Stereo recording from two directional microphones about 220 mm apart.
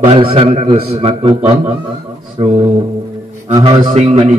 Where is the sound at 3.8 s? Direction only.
30° right (ahead or behind).